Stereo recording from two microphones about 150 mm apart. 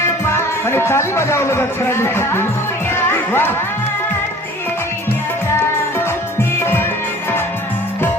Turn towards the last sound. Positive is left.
turn(degrees=15)  # may be behind; listen again after turning